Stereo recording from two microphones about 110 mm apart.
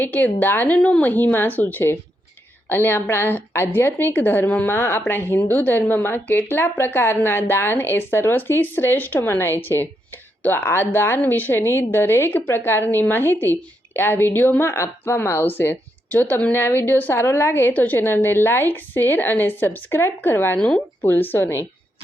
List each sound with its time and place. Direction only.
0.0 s a woman's voice: 15° left (ahead or behind)
20.6 s speech: 10° left (ahead or behind)